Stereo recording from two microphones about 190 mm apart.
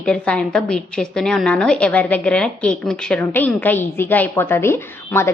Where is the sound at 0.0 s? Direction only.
5° left (ahead or behind).